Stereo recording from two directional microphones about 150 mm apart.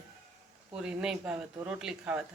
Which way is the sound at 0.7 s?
5° right (ahead or behind).